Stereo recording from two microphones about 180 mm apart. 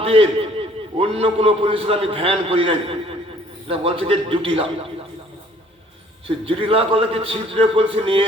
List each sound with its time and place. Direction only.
0.0 s a man's voice: 30° right (ahead or behind)
6.2 s a man's voice: 30° right (ahead or behind)